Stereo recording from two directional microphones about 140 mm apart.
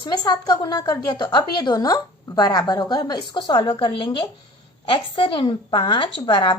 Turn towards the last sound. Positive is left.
turn(degrees=35)  # may be behind; listen again after turning